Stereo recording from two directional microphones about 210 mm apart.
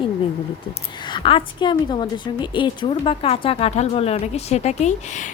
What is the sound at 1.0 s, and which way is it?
A woman's voice, 25° left (ahead or behind).